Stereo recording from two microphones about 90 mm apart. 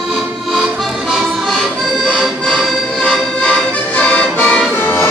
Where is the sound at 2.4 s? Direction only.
10° left (ahead or behind).